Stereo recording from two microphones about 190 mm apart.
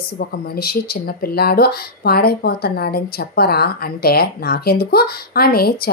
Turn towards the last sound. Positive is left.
turn(degrees=55)  # may be behind; listen again after turning